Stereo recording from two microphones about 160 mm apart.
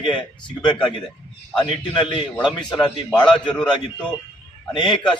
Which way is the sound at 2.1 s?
30° left (ahead or behind).